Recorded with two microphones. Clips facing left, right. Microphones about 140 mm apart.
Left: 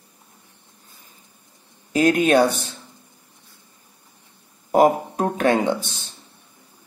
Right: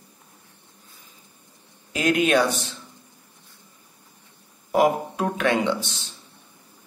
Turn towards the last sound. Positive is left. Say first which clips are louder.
# left 3 dB
turn(degrees=45)  # may be behind; listen again after turning